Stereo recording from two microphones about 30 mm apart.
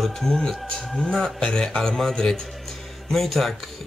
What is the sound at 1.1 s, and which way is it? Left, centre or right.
Speech, centre.